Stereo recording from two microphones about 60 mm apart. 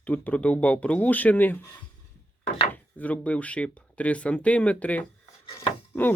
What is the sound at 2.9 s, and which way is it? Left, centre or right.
Speech, left.